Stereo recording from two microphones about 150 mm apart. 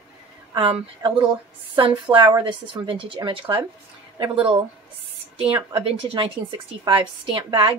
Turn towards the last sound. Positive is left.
turn(degrees=-35)  # may be behind; listen again after turning